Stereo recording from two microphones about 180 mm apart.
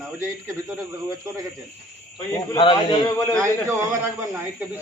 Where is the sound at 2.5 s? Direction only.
25° left (ahead or behind).